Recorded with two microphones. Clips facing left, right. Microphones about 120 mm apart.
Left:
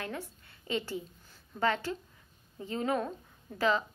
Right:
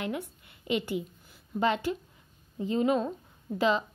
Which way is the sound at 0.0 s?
15° right (ahead or behind).